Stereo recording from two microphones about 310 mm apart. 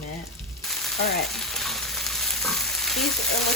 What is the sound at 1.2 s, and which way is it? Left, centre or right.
Frying, centre.